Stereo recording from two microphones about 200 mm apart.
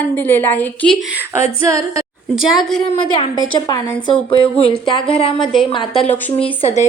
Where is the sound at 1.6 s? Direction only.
15° right (ahead or behind).